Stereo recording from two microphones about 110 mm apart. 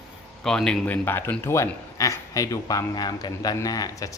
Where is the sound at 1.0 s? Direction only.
20° left (ahead or behind).